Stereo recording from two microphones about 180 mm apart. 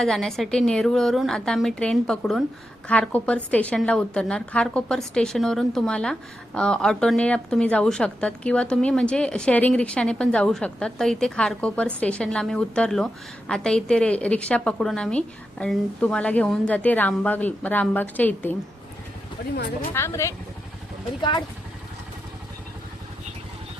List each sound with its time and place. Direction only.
0.0 s a woman's voice: centre (ahead or behind)
19.9 s a woman's voice: 15° left (ahead or behind)
21.2 s speech: 25° left (ahead or behind)